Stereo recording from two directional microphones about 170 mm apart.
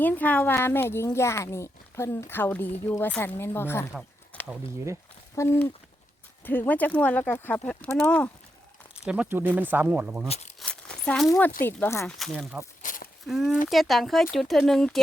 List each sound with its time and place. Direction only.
0.0 s a woman's voice: 10° left (ahead or behind)
5.3 s a woman's voice: 15° left (ahead or behind)
9.0 s speech: 10° right (ahead or behind)
10.6 s a sound: 5° left (ahead or behind)
11.3 s a woman's voice: 10° left (ahead or behind)
12.0 s speech: centre (ahead or behind)
12.8 s a sound: 50° left (ahead or behind)
13.2 s speech: centre (ahead or behind)